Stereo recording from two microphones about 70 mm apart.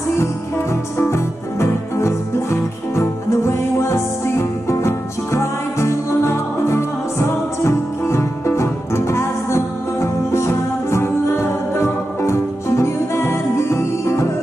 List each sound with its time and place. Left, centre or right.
0.2 s music: left